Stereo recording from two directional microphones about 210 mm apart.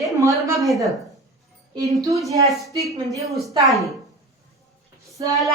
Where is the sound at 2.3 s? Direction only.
15° right (ahead or behind).